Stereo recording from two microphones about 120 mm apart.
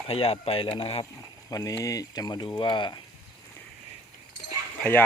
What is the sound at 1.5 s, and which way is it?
Speech, 30° left (ahead or behind).